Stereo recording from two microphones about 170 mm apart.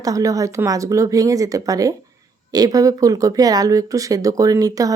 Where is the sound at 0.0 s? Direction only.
20° right (ahead or behind).